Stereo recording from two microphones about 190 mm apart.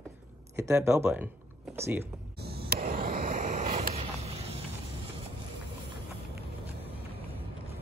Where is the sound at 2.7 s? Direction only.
50° right (ahead or behind); by 4.6 s 30° right (ahead or behind).